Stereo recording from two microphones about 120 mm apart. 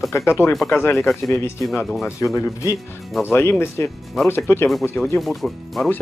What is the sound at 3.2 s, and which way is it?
Speech, 20° left (ahead or behind).